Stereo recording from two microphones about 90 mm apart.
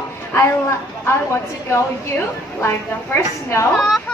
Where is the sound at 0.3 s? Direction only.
30° left (ahead or behind).